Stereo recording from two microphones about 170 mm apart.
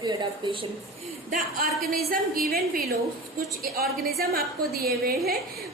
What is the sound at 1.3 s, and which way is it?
A woman's voice, 55° right (ahead or behind).